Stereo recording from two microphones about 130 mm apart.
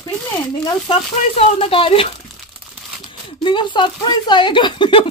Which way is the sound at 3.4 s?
35° left (ahead or behind).